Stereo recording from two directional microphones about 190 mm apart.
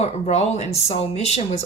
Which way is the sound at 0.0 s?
35° left (ahead or behind).